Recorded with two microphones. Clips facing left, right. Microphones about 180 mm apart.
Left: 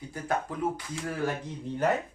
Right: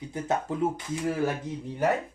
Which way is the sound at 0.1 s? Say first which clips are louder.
Right 3 dB; 25° right (ahead or behind).